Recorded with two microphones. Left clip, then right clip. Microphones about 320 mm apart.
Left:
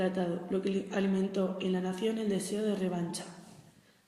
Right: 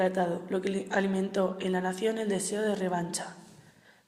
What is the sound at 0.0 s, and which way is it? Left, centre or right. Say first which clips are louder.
A woman's voice: right 5 dB; right.